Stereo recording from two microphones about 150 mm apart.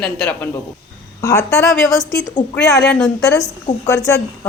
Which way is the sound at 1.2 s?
20° left (ahead or behind).